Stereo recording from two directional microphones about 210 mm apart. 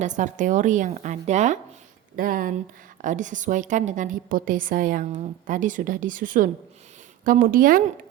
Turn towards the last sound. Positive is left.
turn(degrees=-40)  # may be behind; listen again after turning